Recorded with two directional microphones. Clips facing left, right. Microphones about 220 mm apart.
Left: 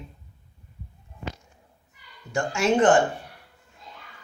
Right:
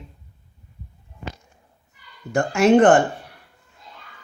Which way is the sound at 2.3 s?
60° right (ahead or behind).